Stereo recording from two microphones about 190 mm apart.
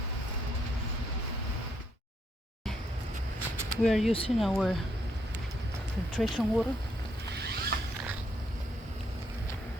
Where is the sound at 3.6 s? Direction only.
Centre (ahead or behind).